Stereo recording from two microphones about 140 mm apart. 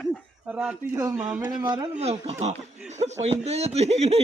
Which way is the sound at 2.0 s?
50° right (ahead or behind).